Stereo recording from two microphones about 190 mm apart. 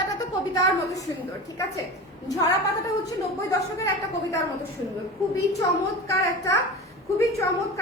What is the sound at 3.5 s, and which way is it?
Speech, 15° left (ahead or behind).